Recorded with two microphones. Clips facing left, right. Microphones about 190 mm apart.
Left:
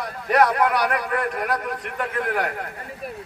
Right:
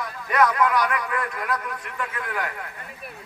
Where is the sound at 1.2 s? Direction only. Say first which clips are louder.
Left 4 dB; 40° left (ahead or behind).